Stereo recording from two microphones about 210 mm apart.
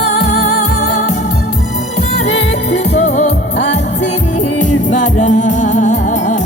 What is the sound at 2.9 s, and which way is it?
Music, 30° left (ahead or behind).